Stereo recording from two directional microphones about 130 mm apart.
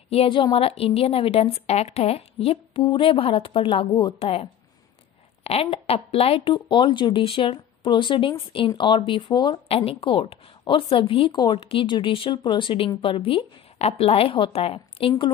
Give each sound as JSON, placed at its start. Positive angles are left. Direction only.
{"t": 0.1, "sound": "speech", "side_deg": 45}
{"t": 5.4, "sound": "speech", "side_deg": 50}
{"t": 9.7, "sound": "speech", "side_deg": 50}